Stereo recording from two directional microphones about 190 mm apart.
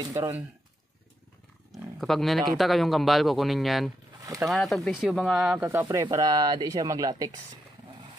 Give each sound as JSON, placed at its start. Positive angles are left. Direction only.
{"t": 0.0, "sound": "speech", "side_deg": -20}
{"t": 1.7, "sound": "speech", "side_deg": 0}
{"t": 4.2, "sound": "a sound", "side_deg": -15}
{"t": 4.5, "sound": "speech", "side_deg": 0}
{"t": 5.7, "sound": "speech", "side_deg": -15}